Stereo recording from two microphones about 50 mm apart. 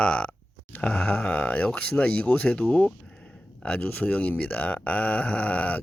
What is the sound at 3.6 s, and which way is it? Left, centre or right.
Speech, left.